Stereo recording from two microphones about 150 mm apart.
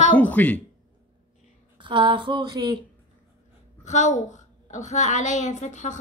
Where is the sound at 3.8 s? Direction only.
50° left (ahead or behind).